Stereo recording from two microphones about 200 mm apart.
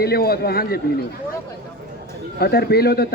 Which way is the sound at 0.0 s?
50° left (ahead or behind).